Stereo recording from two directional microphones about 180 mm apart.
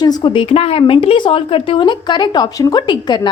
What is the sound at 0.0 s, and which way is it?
Speech, 25° left (ahead or behind).